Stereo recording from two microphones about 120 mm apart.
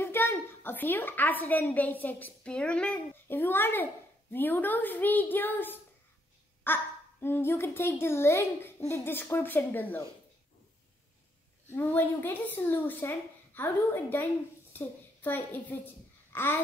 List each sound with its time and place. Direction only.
0.0 s a woman's voice: 20° left (ahead or behind)
11.7 s a woman's voice: 15° left (ahead or behind)
15.2 s a child's voice: 15° left (ahead or behind)